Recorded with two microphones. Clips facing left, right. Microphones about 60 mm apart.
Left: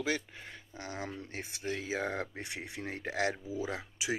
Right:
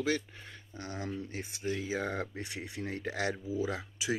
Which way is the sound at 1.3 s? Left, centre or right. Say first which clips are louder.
Even; left.